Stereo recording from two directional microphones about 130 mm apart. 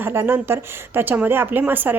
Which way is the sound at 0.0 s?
15° right (ahead or behind).